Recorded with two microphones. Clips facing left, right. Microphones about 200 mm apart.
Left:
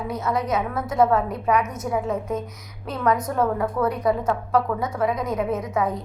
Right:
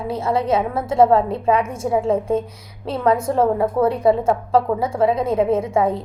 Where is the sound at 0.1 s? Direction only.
30° right (ahead or behind).